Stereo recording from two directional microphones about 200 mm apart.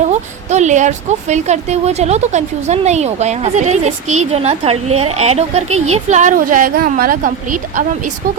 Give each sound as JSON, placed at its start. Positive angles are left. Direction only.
{"t": 0.1, "sound": "a woman's voice", "side_deg": -35}